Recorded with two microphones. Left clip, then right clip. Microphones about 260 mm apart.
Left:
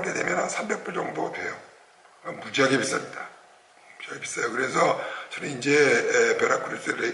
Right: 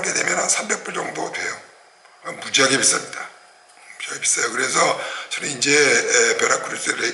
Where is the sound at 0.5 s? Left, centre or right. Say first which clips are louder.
Right 6 dB; centre.